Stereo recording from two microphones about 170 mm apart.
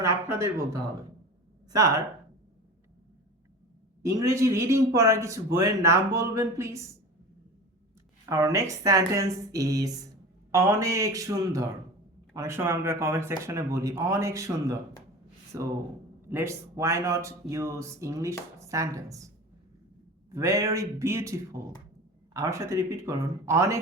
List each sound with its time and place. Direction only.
0.0 s speech: 15° right (ahead or behind)
4.0 s speech: 20° right (ahead or behind)
8.3 s speech: 20° right (ahead or behind)
20.3 s speech: 15° right (ahead or behind)